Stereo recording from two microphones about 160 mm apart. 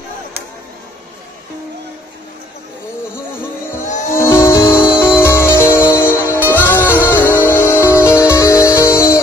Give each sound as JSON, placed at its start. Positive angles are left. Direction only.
{"t": 4.2, "sound": "music", "side_deg": 15}